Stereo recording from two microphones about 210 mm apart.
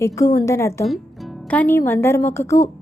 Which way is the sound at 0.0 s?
15° left (ahead or behind).